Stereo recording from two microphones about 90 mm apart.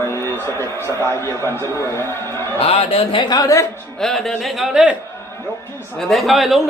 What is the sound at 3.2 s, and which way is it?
Speech, 45° left (ahead or behind).